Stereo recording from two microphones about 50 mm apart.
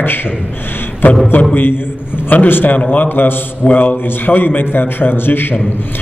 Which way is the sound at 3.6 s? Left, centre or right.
Left.